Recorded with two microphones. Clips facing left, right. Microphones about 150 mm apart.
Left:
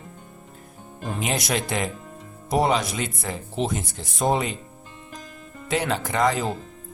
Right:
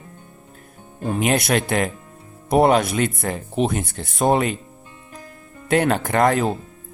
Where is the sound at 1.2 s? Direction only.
60° right (ahead or behind).